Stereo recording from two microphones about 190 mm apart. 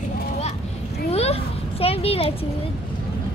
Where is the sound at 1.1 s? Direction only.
35° left (ahead or behind).